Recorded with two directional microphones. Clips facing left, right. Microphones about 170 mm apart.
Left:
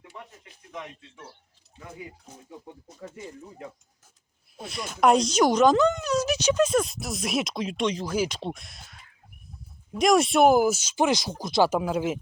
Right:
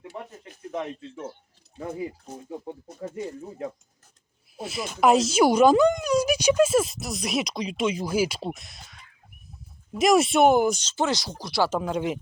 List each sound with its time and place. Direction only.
0.1 s a sound: 40° right (ahead or behind)
2.5 s speech: 40° right (ahead or behind)
4.5 s speech: 5° right (ahead or behind); by 11.7 s 20° left (ahead or behind)
11.7 s speech: 5° left (ahead or behind)